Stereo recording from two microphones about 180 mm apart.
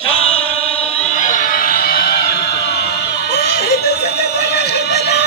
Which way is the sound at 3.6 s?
60° left (ahead or behind).